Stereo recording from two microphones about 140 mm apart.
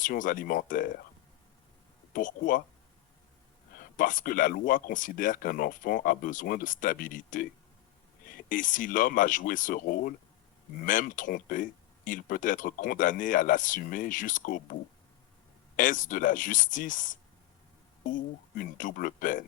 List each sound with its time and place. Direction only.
0.0 s speech: 70° left (ahead or behind)
2.1 s speech: 75° left (ahead or behind)
3.8 s speech: 70° left (ahead or behind); by 10.2 s 90° left
10.8 s speech: 75° left (ahead or behind)